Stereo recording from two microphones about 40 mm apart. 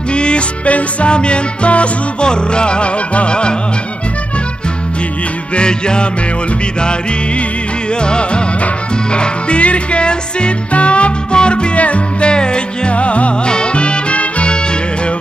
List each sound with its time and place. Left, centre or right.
0.1 s music: left
5.6 s music: left
8.0 s music: left